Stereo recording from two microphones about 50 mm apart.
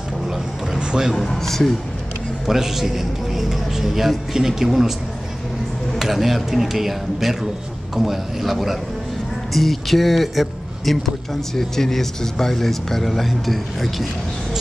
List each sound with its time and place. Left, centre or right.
0.7 s a sound: centre
1.1 s speech: centre
2.4 s a man's voice: centre
5.9 s a man's voice: centre